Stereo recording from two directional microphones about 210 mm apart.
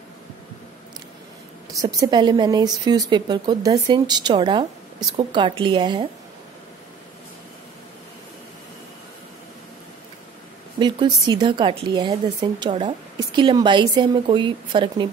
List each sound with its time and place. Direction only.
1.8 s speech: 15° right (ahead or behind)
10.8 s speech: 20° right (ahead or behind)